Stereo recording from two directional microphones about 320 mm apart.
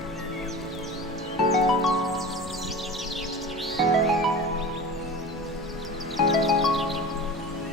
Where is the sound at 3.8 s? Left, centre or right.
Centre.